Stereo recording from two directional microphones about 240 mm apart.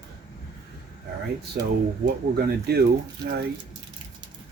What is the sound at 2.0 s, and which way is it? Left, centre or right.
Speech, right.